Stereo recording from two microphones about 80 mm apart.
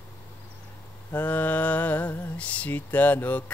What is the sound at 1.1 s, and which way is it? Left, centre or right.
Mantra, centre.